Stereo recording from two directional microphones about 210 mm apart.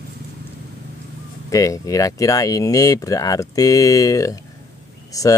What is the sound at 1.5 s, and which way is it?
Speech, 15° left (ahead or behind).